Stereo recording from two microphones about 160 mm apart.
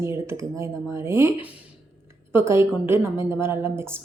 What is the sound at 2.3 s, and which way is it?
Speech, 15° right (ahead or behind).